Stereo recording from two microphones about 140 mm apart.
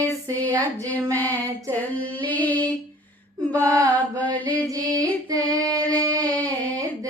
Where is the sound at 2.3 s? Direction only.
10° left (ahead or behind).